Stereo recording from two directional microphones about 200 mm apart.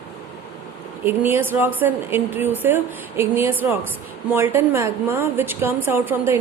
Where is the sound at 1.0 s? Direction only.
10° right (ahead or behind).